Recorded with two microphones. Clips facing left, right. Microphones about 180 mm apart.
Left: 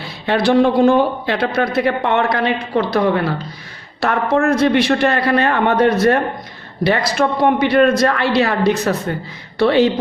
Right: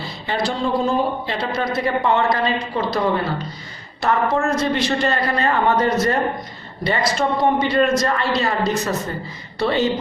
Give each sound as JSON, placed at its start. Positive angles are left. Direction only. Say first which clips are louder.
{"t": 0.0, "sound": "a man's voice", "louder": "left 6 dB", "side_deg": 65}